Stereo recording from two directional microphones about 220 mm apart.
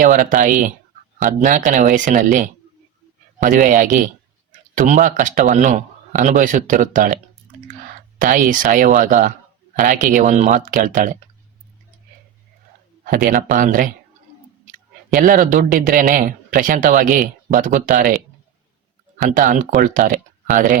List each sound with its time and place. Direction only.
0.0 s a man's voice: 40° right (ahead or behind)
8.2 s a man's voice: 40° right (ahead or behind)
13.2 s a man's voice: 40° right (ahead or behind)
19.3 s a man's voice: 40° right (ahead or behind)